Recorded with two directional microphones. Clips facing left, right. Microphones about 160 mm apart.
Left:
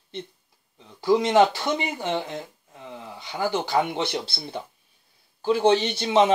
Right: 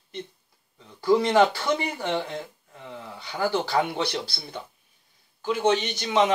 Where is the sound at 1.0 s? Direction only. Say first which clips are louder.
Left 1 dB; 20° left (ahead or behind).